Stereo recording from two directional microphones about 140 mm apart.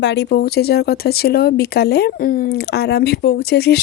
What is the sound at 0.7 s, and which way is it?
Speech, 90° left.